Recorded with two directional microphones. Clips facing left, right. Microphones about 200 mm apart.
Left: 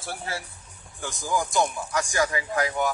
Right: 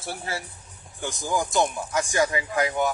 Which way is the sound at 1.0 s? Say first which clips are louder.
Right 1 dB; 20° right (ahead or behind).